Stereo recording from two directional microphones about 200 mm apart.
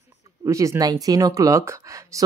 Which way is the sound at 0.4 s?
15° right (ahead or behind).